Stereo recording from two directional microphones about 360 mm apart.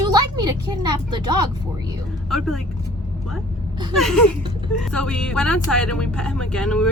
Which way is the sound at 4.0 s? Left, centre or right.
Centre.